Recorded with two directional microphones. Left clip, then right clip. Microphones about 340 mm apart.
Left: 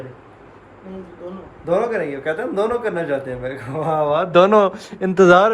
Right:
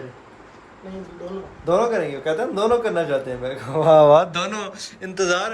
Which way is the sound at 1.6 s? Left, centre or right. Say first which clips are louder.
Even; centre.